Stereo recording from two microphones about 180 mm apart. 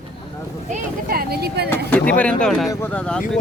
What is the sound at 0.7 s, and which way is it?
Speech, 55° right (ahead or behind).